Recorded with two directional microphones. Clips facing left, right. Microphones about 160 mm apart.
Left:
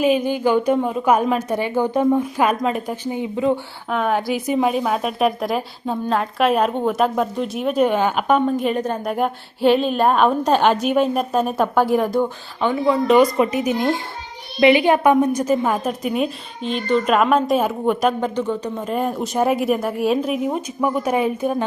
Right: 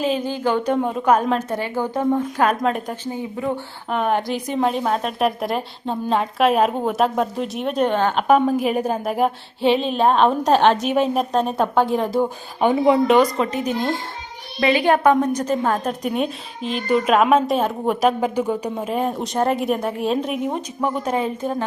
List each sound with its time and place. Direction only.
0.0 s a woman's voice: 15° left (ahead or behind)
3.0 s a woman's voice: 15° left (ahead or behind)
3.9 s a woman's voice: 5° right (ahead or behind)
8.3 s a woman's voice: 5° right (ahead or behind)
12.2 s speech: 15° right (ahead or behind)
13.1 s a woman's voice: 10° left (ahead or behind); by 18.9 s 10° right (ahead or behind)
18.9 s a woman's voice: centre (ahead or behind)